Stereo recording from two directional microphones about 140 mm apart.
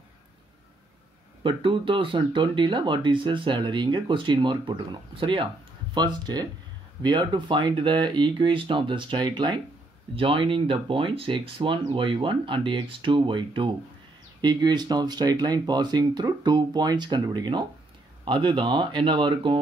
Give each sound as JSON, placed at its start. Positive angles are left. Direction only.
{"t": 1.4, "sound": "speech", "side_deg": -35}